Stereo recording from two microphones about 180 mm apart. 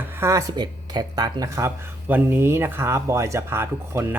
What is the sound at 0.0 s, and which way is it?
Speech, 15° right (ahead or behind).